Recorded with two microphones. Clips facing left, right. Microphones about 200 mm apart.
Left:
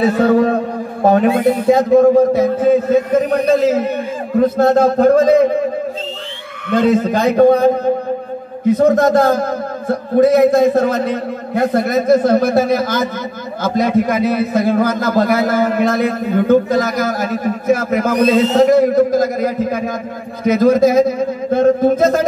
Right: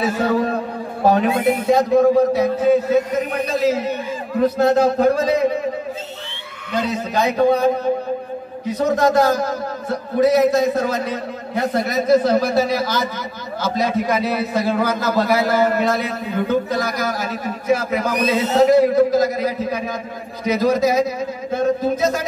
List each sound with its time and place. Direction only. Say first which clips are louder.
0.0 s a man's voice: left 7 dB; 55° left (ahead or behind)
6.7 s a man's voice: left 9 dB; 55° left (ahead or behind)